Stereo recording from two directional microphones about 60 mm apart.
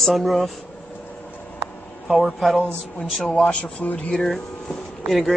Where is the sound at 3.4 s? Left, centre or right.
Centre.